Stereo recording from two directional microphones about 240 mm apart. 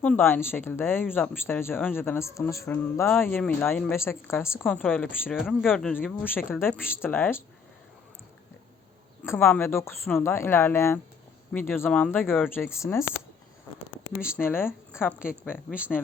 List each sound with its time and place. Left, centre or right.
0.0 s speech: centre
9.2 s speech: centre
14.2 s speech: centre
14.4 s speech: centre
15.5 s speech: centre